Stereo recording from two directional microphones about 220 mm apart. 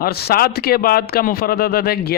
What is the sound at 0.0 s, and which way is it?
A man's voice, 45° left (ahead or behind).